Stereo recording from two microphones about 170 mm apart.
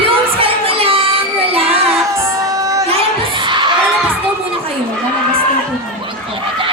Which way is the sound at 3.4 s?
25° right (ahead or behind).